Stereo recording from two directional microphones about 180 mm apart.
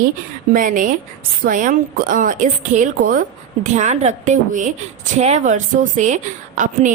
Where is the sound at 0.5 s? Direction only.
45° right (ahead or behind).